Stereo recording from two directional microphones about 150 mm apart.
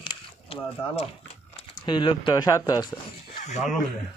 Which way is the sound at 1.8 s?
30° left (ahead or behind).